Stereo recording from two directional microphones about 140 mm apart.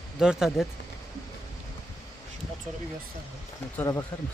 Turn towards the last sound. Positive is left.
turn(degrees=20)  # may be behind; listen again after turning